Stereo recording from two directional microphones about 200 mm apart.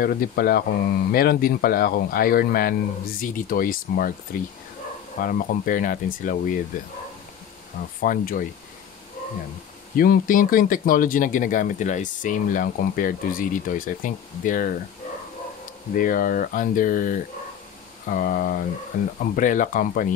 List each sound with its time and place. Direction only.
0.0 s speech: 50° left (ahead or behind)
8.0 s speech: 45° left (ahead or behind)
9.9 s speech: 45° left (ahead or behind)
16.0 s speech: 45° left (ahead or behind)